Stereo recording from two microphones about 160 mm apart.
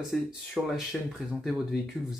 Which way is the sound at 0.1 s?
Centre (ahead or behind).